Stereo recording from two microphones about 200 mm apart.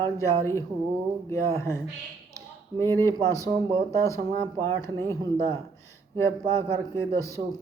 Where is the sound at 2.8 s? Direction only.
15° left (ahead or behind).